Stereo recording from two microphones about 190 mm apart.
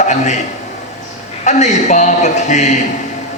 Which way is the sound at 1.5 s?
40° left (ahead or behind).